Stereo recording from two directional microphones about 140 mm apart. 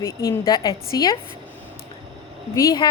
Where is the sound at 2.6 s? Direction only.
25° left (ahead or behind).